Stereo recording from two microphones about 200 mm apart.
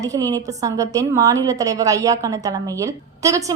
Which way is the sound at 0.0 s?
15° right (ahead or behind).